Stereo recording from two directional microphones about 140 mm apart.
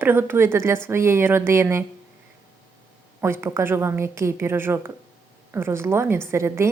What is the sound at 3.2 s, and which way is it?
Speech, 20° right (ahead or behind).